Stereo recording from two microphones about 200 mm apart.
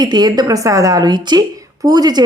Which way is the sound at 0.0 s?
20° right (ahead or behind).